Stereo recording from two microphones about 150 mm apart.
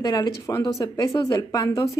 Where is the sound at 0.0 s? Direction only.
25° left (ahead or behind).